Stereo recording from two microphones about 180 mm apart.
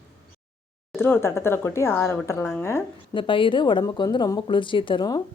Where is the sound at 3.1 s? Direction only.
30° left (ahead or behind).